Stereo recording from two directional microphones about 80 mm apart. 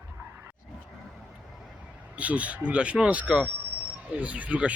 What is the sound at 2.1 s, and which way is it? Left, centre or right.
Speech, centre.